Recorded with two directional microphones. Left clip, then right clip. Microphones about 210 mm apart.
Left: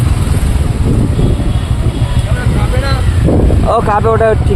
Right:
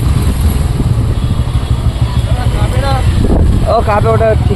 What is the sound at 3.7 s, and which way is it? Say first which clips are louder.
Speech: even; 20° left (ahead or behind).